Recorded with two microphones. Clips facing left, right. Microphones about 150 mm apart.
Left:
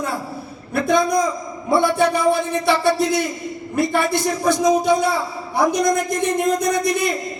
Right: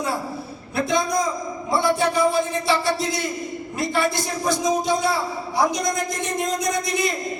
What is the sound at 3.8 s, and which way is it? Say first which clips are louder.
A man's voice: left 4 dB; 55° left (ahead or behind).